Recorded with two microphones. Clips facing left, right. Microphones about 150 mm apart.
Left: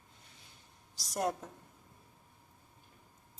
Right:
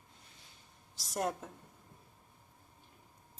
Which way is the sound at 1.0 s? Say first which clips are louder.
Left 1 dB; centre (ahead or behind).